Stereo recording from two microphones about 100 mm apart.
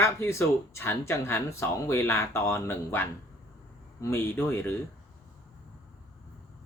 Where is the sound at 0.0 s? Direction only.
25° left (ahead or behind).